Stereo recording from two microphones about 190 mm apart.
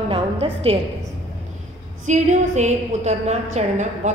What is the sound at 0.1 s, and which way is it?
Music, 30° right (ahead or behind).